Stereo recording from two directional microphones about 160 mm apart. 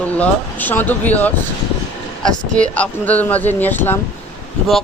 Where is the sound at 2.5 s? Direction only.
10° left (ahead or behind).